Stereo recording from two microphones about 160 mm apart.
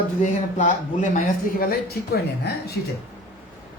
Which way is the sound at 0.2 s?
50° left (ahead or behind).